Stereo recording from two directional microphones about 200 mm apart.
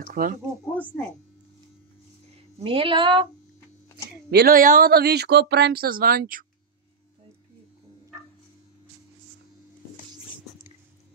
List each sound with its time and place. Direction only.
0.1 s speech: 45° right (ahead or behind)
2.3 s speech: 25° right (ahead or behind)
4.3 s speech: 50° right (ahead or behind)